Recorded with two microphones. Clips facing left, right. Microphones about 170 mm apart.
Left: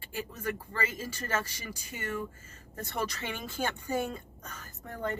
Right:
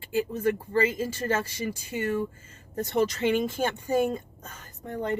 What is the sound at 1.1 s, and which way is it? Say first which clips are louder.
Speech: right 6 dB; 30° right (ahead or behind).